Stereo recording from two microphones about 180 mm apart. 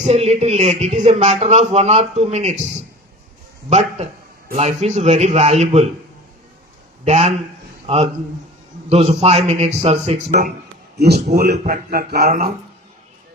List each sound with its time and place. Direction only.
0.0 s speech: 35° right (ahead or behind)
3.7 s speech: 40° right (ahead or behind)
7.0 s speech: 35° right (ahead or behind)
10.9 s a man's voice: 60° right (ahead or behind)